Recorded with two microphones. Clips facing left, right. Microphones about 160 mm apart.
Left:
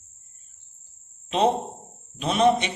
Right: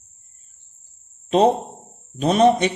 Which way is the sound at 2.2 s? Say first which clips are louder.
Right 5 dB; 40° right (ahead or behind).